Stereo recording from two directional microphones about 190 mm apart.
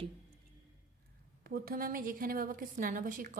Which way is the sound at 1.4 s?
50° right (ahead or behind).